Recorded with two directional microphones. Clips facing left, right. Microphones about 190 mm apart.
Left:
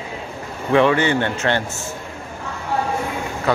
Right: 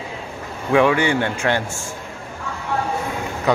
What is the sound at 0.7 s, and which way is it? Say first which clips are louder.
Speech: even; 10° right (ahead or behind).